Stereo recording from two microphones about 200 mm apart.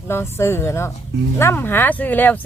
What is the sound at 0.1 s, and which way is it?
Speech, 10° left (ahead or behind).